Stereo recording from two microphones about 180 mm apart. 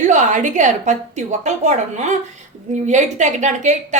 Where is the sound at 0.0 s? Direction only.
45° right (ahead or behind).